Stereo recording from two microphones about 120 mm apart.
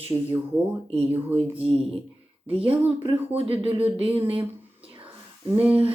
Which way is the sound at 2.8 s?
55° right (ahead or behind).